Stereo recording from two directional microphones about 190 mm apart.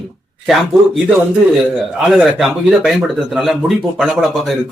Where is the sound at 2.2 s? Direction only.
Centre (ahead or behind).